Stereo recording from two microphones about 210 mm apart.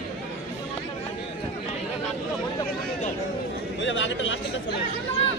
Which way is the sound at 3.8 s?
60° left (ahead or behind).